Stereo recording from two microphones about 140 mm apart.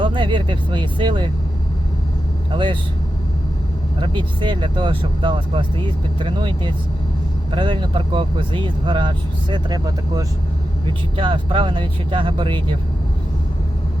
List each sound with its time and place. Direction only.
0.0 s speech: 35° right (ahead or behind)
2.5 s speech: 35° right (ahead or behind)
4.0 s speech: 35° right (ahead or behind)